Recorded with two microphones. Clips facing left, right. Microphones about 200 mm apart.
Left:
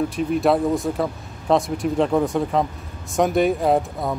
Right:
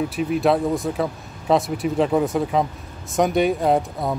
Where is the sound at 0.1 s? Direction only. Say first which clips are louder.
Even; 5° right (ahead or behind).